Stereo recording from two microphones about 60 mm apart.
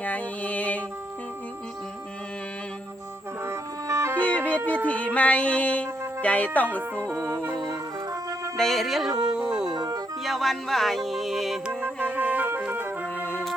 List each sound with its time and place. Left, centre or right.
0.0 s a sound: left
3.4 s music: right
4.2 s music: left
4.9 s speech: left
7.1 s music: right
7.5 s music: right
8.5 s music: centre
10.2 s music: centre
11.7 s music: right
13.1 s music: left